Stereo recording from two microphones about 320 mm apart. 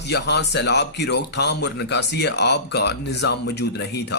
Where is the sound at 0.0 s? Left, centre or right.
Left.